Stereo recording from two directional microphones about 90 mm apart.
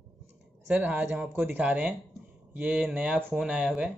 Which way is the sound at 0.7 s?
15° right (ahead or behind).